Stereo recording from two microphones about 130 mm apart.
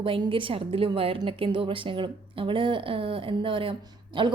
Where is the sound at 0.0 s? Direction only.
45° right (ahead or behind).